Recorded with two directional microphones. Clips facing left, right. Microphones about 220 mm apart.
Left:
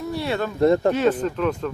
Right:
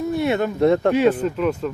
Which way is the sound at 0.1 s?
20° right (ahead or behind).